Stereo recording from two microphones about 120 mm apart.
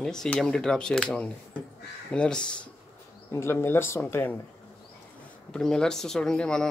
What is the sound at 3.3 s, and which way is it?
Speech, 20° left (ahead or behind).